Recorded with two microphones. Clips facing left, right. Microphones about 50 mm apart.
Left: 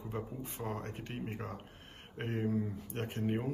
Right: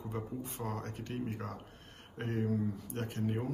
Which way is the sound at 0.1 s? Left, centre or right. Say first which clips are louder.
Right 1 dB; left.